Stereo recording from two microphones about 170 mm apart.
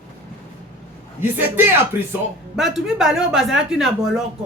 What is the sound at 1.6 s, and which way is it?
Speech, 15° right (ahead or behind).